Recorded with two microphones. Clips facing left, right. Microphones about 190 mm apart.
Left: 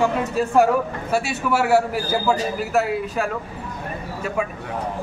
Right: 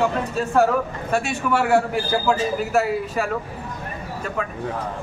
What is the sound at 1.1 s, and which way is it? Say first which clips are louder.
A man's voice: even; 5° left (ahead or behind).